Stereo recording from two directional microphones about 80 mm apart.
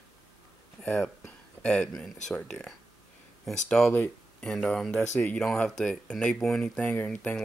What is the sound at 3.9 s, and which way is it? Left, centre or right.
Speech, centre.